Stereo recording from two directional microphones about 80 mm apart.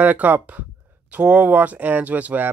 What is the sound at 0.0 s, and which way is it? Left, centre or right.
Speech, right.